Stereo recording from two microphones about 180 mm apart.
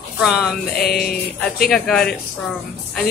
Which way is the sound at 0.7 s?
60° left (ahead or behind).